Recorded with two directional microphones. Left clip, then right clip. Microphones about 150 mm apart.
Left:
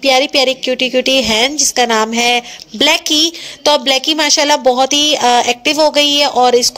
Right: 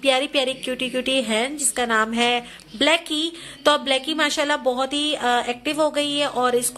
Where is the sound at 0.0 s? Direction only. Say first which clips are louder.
Left 9 dB; 35° left (ahead or behind).